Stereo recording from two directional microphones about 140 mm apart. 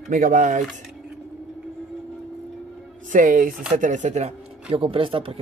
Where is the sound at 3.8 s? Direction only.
60° right (ahead or behind).